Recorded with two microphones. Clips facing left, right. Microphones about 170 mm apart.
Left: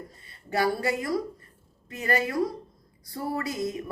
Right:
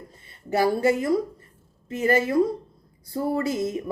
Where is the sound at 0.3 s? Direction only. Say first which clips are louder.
Right 4 dB; 25° right (ahead or behind).